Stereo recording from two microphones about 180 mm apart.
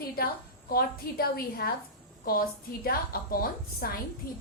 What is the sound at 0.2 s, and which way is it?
A woman's voice, 60° left (ahead or behind).